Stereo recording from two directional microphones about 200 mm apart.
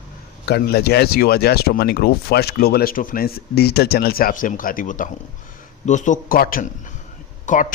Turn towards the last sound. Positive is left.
turn(degrees=40)  # may be behind; listen again after turning